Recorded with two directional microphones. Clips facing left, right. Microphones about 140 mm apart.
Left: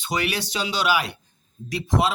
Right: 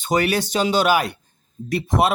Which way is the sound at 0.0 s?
45° right (ahead or behind).